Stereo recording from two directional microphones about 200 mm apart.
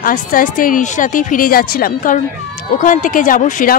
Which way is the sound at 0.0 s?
40° left (ahead or behind).